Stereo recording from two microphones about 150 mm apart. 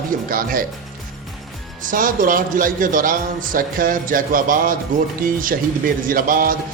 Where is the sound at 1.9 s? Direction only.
65° right (ahead or behind).